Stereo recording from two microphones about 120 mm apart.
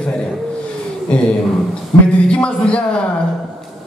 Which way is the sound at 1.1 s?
10° left (ahead or behind).